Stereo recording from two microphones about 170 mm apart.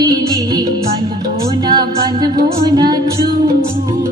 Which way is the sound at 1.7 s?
25° right (ahead or behind).